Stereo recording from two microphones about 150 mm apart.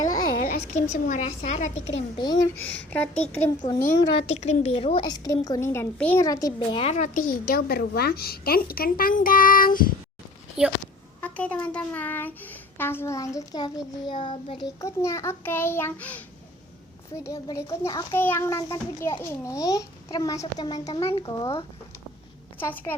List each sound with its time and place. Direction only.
0.0 s a sound: 25° left (ahead or behind)
0.7 s a woman's voice: 55° left (ahead or behind)
1.4 s a woman's voice: 50° left (ahead or behind)
2.1 s a woman's voice: 25° left (ahead or behind)
2.6 s a child's voice: 10° left (ahead or behind)
4.2 s a woman's voice: 45° left (ahead or behind); by 6.7 s 25° left (ahead or behind)
6.7 s a woman's voice: 45° left (ahead or behind)
7.3 s a woman's voice: 85° left; by 9.9 s 70° left (ahead or behind)
11.2 s a child's voice: 10° left (ahead or behind); by 14.7 s 35° left (ahead or behind)
14.8 s a child's voice: 20° left (ahead or behind)
17.2 s a woman's voice: 25° left (ahead or behind)
22.5 s a child's voice: 10° left (ahead or behind)